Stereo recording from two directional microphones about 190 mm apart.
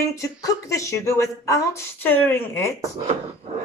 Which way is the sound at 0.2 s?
15° left (ahead or behind).